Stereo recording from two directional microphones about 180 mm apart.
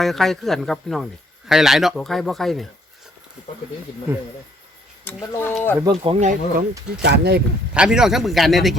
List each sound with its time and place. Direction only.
0.0 s speech: centre (ahead or behind)
4.1 s speech: 10° right (ahead or behind)
5.0 s speech: 15° left (ahead or behind)
5.8 s speech: 30° right (ahead or behind)
7.0 s speech: 65° right (ahead or behind)
7.7 s speech: 5° right (ahead or behind)